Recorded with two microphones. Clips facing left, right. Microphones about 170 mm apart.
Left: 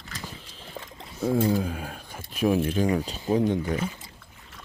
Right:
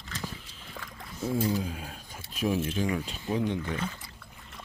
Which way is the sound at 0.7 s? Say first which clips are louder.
Left 3 dB; 20° left (ahead or behind).